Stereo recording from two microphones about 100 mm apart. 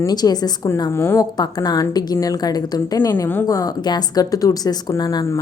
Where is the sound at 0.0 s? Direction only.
40° left (ahead or behind).